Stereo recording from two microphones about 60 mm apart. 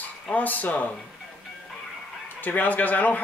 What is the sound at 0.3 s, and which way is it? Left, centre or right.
Speech, left.